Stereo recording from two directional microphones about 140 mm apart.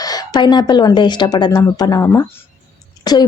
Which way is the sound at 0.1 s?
30° left (ahead or behind).